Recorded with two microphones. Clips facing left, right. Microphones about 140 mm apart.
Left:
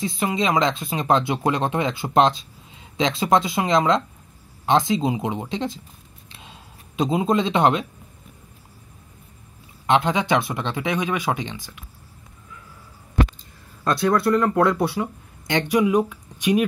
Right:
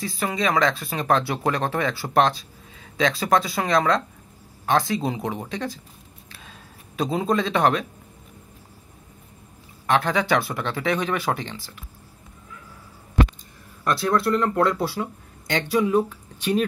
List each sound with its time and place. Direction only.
0.0 s speech: 20° left (ahead or behind)
6.3 s a sound: 25° left (ahead or behind)
9.8 s speech: 20° left (ahead or behind)
13.8 s speech: 20° left (ahead or behind)